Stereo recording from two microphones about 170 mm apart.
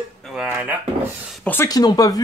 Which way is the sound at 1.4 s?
15° left (ahead or behind).